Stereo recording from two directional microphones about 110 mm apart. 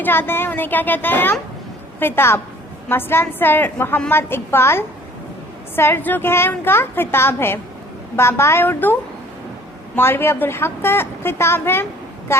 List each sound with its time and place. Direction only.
0.0 s a child's voice: 20° left (ahead or behind)